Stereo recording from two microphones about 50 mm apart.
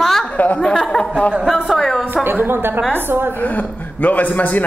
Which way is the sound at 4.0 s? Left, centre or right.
Left.